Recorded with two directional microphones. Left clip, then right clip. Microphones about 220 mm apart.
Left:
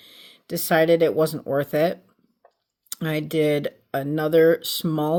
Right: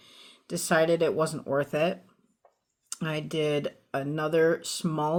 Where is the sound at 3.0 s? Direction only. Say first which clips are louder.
Left 7 dB; 35° left (ahead or behind).